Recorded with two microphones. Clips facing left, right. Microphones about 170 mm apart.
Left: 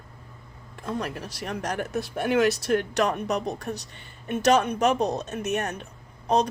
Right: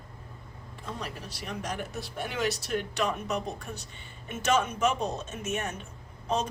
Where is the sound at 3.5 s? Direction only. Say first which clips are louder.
Left 7 dB; 35° left (ahead or behind).